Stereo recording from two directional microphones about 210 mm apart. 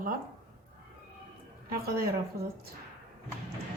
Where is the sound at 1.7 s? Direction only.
45° right (ahead or behind).